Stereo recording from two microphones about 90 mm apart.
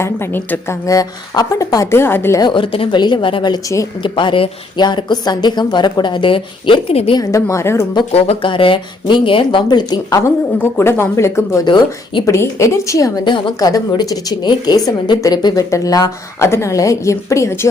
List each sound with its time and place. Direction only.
0.0 s speech: 25° left (ahead or behind)
0.9 s a woman's voice: 40° left (ahead or behind)
2.4 s speech: 70° left (ahead or behind)
3.0 s a woman's voice: 60° left (ahead or behind)
7.2 s a woman's voice: 35° left (ahead or behind)
8.1 s a woman's voice: 80° left; by 10.3 s 40° left (ahead or behind)
10.6 s speech: 25° left (ahead or behind)
11.6 s a woman's voice: 60° left (ahead or behind)
12.2 s a woman's voice: 30° left (ahead or behind)
13.2 s a woman's voice: 65° left (ahead or behind)
13.6 s a woman's voice: 45° left (ahead or behind)
16.4 s a woman's voice: 30° left (ahead or behind)